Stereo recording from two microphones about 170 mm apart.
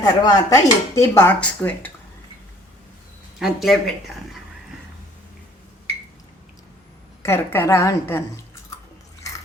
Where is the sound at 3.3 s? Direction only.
Centre (ahead or behind).